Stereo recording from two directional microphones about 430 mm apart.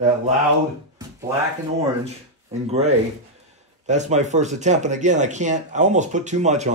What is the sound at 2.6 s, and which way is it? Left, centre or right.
Speech, centre.